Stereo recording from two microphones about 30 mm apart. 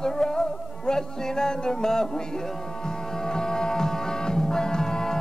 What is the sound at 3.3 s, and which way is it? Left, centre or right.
Music, left.